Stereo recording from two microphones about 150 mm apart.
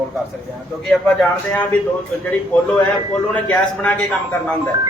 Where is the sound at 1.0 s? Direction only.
5° left (ahead or behind).